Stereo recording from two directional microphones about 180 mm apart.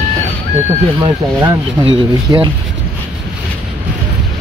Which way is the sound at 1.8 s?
30° right (ahead or behind).